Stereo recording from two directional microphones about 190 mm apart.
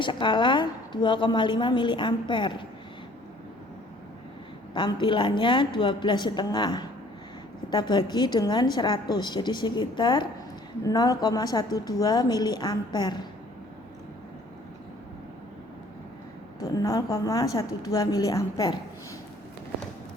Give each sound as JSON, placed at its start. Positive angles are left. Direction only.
{"t": 0.0, "sound": "a woman's voice", "side_deg": 25}
{"t": 4.7, "sound": "a woman's voice", "side_deg": 25}
{"t": 16.6, "sound": "a woman's voice", "side_deg": 15}